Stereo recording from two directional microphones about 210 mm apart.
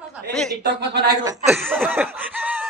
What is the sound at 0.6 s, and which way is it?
Speech, 55° right (ahead or behind).